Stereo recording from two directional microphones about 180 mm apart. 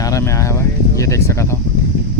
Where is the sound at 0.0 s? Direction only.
15° left (ahead or behind).